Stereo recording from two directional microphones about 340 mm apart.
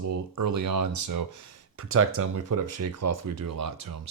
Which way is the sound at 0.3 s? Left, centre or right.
Right.